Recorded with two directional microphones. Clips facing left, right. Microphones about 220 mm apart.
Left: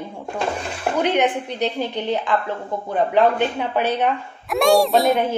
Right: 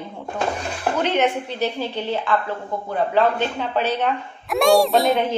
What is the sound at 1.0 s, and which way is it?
Speech, 15° left (ahead or behind).